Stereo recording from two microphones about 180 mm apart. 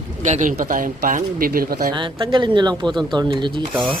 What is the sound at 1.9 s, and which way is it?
Speech, 25° right (ahead or behind).